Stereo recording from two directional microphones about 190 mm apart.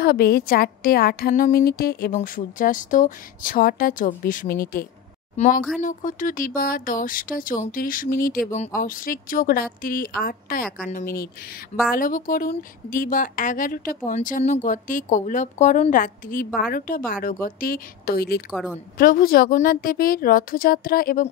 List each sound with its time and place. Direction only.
0.0 s speech: 55° left (ahead or behind)
5.3 s speech: 35° left (ahead or behind)